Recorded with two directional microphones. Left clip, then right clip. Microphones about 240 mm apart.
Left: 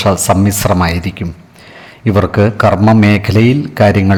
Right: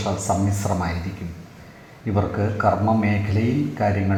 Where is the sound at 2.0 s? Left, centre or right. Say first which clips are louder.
Left 12 dB; left.